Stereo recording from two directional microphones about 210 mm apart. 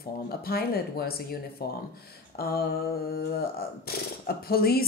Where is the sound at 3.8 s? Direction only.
45° left (ahead or behind).